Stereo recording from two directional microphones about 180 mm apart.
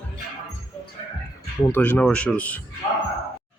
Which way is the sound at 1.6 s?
10° left (ahead or behind).